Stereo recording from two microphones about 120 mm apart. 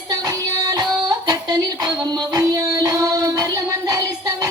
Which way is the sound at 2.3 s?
30° right (ahead or behind).